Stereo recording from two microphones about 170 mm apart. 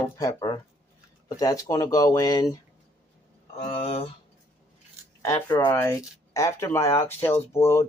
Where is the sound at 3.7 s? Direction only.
35° left (ahead or behind).